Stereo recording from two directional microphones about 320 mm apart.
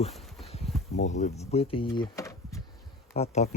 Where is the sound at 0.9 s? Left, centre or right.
Left.